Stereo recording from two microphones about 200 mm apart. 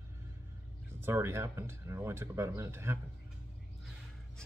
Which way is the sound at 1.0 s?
10° right (ahead or behind).